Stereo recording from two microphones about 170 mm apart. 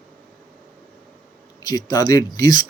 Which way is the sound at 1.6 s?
20° left (ahead or behind).